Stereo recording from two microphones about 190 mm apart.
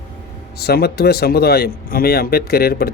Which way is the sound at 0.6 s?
55° left (ahead or behind).